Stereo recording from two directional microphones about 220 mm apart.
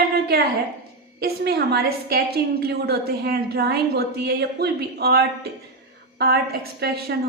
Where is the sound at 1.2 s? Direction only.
45° right (ahead or behind).